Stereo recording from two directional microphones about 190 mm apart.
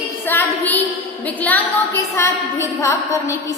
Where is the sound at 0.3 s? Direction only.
10° left (ahead or behind).